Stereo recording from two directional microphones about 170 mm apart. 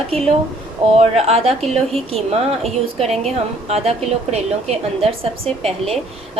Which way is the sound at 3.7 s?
40° right (ahead or behind).